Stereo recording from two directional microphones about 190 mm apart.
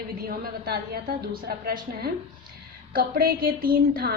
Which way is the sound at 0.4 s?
50° right (ahead or behind).